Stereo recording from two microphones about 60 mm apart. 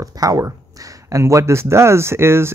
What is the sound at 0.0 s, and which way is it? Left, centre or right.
Speech, right.